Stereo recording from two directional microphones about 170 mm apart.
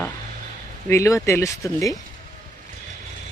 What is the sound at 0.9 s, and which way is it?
Speech, 15° left (ahead or behind).